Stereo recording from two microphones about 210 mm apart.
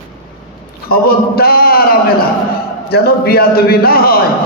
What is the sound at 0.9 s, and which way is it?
A man's voice, 45° left (ahead or behind).